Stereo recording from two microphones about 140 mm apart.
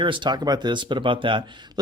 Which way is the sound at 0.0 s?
35° right (ahead or behind).